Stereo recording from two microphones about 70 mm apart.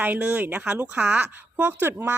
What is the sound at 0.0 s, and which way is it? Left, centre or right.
Speech, right.